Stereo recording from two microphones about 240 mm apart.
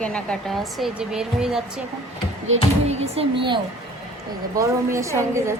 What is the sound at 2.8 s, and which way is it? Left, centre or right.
A woman's voice, right.